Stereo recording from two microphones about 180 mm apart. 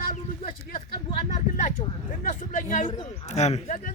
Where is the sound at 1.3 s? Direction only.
40° left (ahead or behind).